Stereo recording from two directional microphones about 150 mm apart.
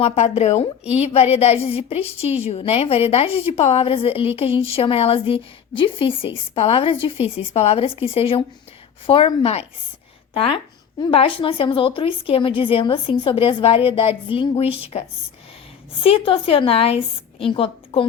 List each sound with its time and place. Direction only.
0.0 s a woman's voice: 45° left (ahead or behind)
11.1 s a woman's voice: 40° left (ahead or behind)
16.0 s a woman's voice: 35° left (ahead or behind)